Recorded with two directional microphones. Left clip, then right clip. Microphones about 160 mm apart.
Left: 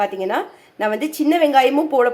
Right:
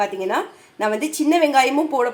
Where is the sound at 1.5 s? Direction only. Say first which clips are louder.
Left 2 dB; 20° left (ahead or behind).